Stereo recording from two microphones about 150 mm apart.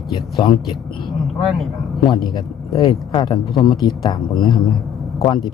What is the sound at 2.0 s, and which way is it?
A man's voice, 30° left (ahead or behind).